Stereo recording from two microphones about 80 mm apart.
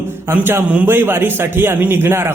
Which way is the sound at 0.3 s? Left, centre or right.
Right.